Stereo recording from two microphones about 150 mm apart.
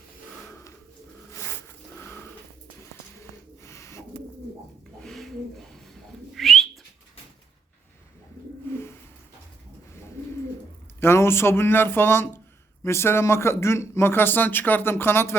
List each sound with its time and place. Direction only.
0.4 s a sound: 15° left (ahead or behind)
4.9 s bird: centre (ahead or behind)
11.0 s speech: 15° left (ahead or behind)